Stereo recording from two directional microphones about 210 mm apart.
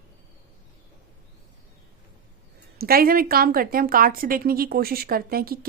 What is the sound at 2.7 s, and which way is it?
A woman's voice, 45° right (ahead or behind).